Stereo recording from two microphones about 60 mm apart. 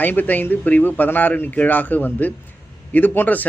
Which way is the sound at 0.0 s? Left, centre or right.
Left.